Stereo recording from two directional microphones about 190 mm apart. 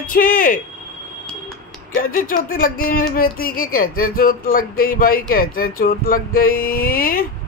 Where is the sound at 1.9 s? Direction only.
45° left (ahead or behind).